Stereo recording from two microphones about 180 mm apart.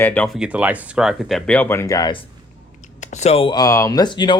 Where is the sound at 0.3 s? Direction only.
5° right (ahead or behind); by 2.2 s 20° left (ahead or behind).